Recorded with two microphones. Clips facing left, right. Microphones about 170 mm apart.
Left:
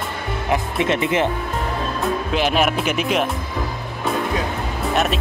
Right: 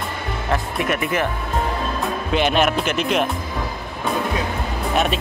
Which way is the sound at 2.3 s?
Centre (ahead or behind).